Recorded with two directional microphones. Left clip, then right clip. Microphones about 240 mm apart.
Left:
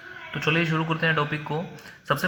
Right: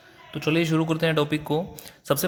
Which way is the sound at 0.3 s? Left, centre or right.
Right.